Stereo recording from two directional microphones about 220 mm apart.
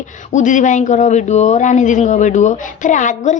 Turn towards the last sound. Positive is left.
turn(degrees=35)  # may be behind; listen again after turning